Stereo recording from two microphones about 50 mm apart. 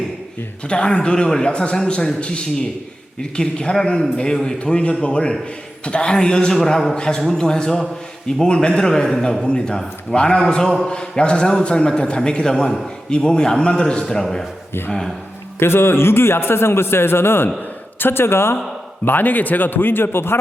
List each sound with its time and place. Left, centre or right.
0.7 s a man's voice: left
15.5 s a man's voice: left
19.0 s a man's voice: left